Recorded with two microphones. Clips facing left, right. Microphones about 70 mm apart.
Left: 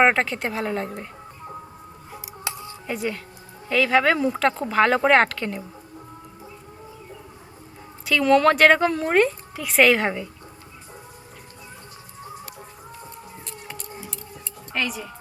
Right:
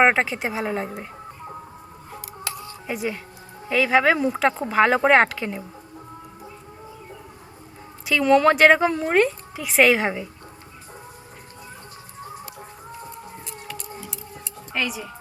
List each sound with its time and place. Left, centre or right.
0.0 s speech: centre
2.4 s a sound: left
2.8 s speech: centre
8.0 s a woman's voice: centre
14.7 s speech: centre